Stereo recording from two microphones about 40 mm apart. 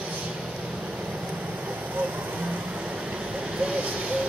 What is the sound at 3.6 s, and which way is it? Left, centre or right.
Vehicle, right.